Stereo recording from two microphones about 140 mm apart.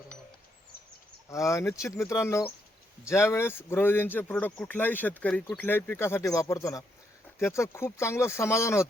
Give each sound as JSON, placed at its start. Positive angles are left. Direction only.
{"t": 1.3, "sound": "speech", "side_deg": 20}